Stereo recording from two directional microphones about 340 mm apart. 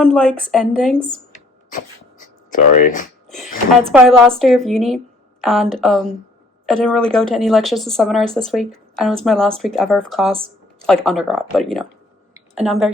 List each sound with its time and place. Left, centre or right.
0.0 s speech: centre
1.7 s speech: left
3.9 s speech: centre